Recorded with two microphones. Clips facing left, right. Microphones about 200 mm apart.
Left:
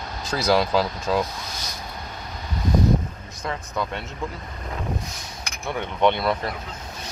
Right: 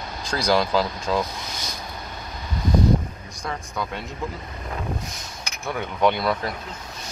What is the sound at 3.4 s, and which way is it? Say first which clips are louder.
Speech: left 2 dB; centre (ahead or behind).